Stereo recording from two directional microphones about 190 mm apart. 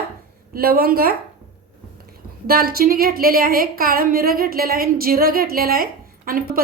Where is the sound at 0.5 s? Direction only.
50° right (ahead or behind).